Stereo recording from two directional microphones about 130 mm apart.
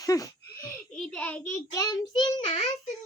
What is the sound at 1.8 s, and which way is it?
Speech, 30° left (ahead or behind).